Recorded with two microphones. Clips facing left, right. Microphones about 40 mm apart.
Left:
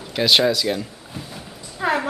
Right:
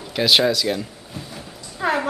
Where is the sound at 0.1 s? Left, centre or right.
Centre.